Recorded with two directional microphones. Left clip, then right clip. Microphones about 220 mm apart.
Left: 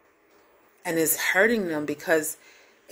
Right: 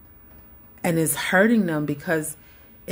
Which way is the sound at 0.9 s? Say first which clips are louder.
Right 1 dB; 10° left (ahead or behind).